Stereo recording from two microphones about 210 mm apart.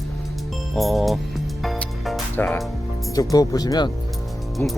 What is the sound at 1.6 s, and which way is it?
Music, centre (ahead or behind).